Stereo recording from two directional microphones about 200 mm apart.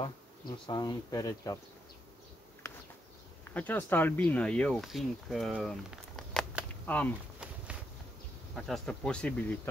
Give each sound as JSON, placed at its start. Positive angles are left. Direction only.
{"t": 0.7, "sound": "speech", "side_deg": 20}
{"t": 3.5, "sound": "speech", "side_deg": 10}
{"t": 8.5, "sound": "speech", "side_deg": 0}